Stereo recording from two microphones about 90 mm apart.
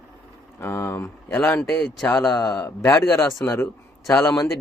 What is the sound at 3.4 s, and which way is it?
Speech, 20° left (ahead or behind).